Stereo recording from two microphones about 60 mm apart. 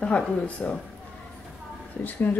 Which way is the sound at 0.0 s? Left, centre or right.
Centre.